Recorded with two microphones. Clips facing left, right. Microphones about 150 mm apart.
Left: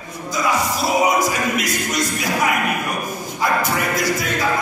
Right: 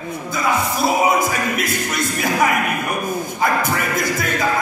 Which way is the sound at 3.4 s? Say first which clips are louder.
Left 1 dB; 50° right (ahead or behind).